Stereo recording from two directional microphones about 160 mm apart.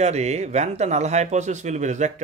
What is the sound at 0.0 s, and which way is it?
Speech, 45° right (ahead or behind).